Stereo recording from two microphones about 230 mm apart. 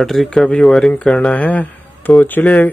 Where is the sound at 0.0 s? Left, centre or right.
Centre.